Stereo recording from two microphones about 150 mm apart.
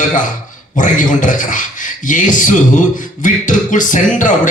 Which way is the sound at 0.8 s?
60° left (ahead or behind).